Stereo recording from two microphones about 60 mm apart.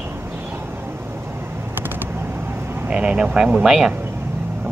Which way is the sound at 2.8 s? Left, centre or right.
Centre.